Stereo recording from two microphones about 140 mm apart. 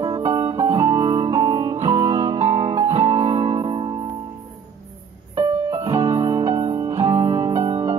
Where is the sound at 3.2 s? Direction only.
40° right (ahead or behind).